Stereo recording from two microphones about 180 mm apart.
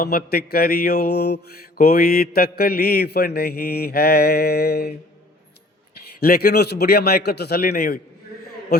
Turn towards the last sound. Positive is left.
turn(degrees=60)  # may be behind; listen again after turning